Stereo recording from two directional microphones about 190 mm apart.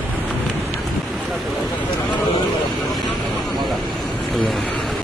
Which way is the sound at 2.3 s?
20° left (ahead or behind).